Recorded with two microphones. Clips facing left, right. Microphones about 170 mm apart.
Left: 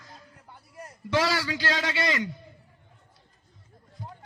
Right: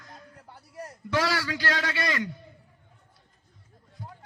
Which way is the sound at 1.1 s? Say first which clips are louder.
Left 1 dB; 20° left (ahead or behind).